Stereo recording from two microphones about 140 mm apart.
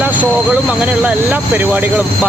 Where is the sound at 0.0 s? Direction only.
10° right (ahead or behind).